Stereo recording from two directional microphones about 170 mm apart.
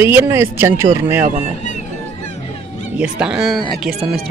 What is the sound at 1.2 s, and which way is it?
Speech, 40° right (ahead or behind).